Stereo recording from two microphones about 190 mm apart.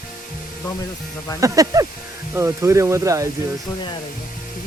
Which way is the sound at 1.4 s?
15° right (ahead or behind).